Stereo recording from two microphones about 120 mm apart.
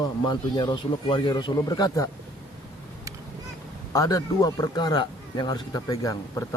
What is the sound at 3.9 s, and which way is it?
Speech, 30° left (ahead or behind).